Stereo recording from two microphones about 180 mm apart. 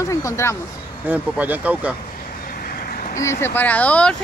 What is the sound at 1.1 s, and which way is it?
Speech, 10° right (ahead or behind).